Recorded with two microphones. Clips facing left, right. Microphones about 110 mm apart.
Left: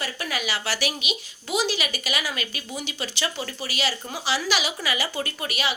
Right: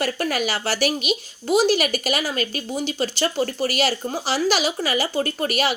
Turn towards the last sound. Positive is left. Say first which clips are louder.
# right 7 dB
turn(degrees=-45)  # may be behind; listen again after turning